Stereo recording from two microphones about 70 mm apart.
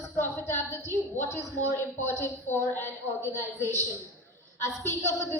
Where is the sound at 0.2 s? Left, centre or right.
Left.